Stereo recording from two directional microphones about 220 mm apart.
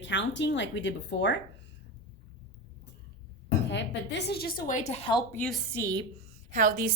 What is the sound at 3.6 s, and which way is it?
Speech, 55° left (ahead or behind).